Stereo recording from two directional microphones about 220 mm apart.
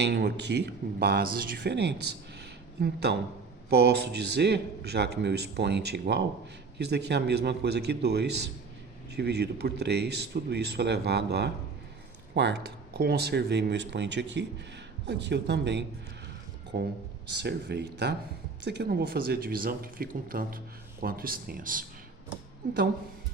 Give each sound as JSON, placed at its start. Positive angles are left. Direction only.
{"t": 0.0, "sound": "a man's voice", "side_deg": -50}